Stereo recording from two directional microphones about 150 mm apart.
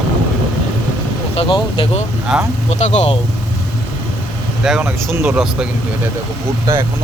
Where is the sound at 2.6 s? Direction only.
50° left (ahead or behind).